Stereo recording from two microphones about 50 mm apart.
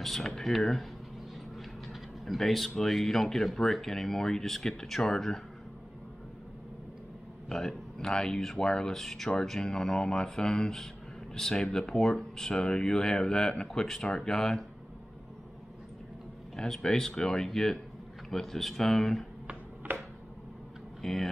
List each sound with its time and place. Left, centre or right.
0.0 s speech: centre
1.6 s a sound: centre
2.7 s speech: centre
7.4 s speech: centre
16.5 s speech: centre
19.4 s a sound: right
21.0 s speech: centre